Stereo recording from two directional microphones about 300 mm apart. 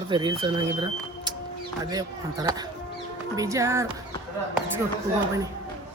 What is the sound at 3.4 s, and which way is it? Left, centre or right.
Speech, centre.